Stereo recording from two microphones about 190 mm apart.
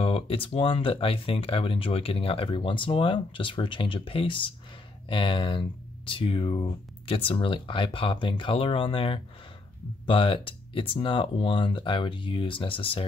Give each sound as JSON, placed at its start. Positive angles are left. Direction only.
{"t": 0.0, "sound": "speech", "side_deg": 30}